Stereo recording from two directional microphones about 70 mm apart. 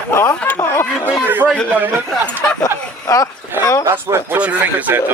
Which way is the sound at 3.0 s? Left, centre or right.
Left.